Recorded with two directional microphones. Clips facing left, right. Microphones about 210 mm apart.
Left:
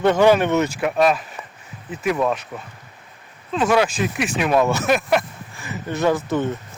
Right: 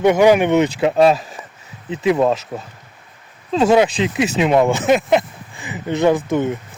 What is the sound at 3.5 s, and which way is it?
Speech, 25° right (ahead or behind).